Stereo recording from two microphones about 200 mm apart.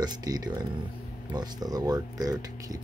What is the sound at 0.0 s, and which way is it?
Speech, 20° right (ahead or behind).